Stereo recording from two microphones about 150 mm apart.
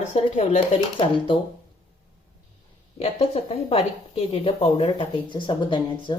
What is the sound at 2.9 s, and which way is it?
A woman's voice, 45° left (ahead or behind).